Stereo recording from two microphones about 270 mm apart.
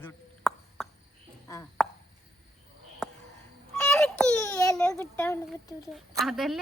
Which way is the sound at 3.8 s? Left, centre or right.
Centre.